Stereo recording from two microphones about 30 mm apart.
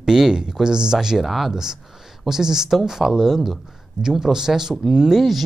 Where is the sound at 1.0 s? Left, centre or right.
Centre.